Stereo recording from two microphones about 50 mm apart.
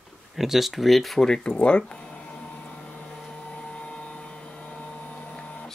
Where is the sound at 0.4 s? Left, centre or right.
Centre.